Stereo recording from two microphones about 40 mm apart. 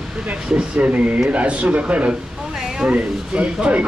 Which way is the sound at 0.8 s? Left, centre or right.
Right.